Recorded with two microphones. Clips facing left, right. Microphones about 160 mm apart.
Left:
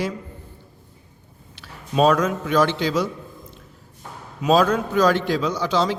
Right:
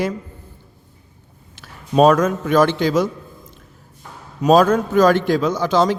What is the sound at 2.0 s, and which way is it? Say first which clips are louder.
A man's voice: right 4 dB; 50° right (ahead or behind).